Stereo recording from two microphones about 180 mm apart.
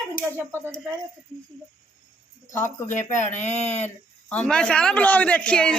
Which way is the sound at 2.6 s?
45° left (ahead or behind).